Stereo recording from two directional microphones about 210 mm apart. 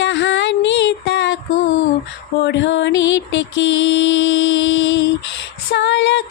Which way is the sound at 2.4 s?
55° left (ahead or behind).